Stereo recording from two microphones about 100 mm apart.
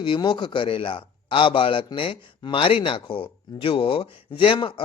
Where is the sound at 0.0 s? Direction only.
50° left (ahead or behind).